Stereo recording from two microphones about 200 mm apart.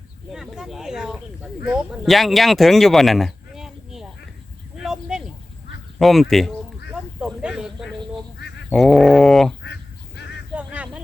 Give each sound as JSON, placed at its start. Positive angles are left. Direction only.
{"t": 0.3, "sound": "speech", "side_deg": 0}
{"t": 4.8, "sound": "a sound", "side_deg": -5}
{"t": 6.0, "sound": "speech", "side_deg": 0}
{"t": 6.9, "sound": "snake", "side_deg": -5}
{"t": 8.4, "sound": "goose", "side_deg": 55}
{"t": 8.7, "sound": "speech", "side_deg": 0}
{"t": 10.5, "sound": "a sound", "side_deg": -5}